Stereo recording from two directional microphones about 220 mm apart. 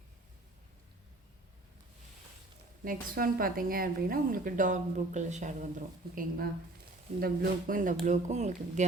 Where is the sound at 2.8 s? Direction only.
40° right (ahead or behind).